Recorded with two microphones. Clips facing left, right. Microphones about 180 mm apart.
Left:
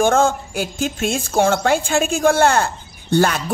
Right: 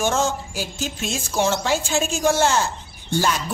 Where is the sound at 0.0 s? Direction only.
55° left (ahead or behind).